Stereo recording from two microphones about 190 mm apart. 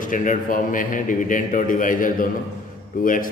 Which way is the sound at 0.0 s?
45° left (ahead or behind).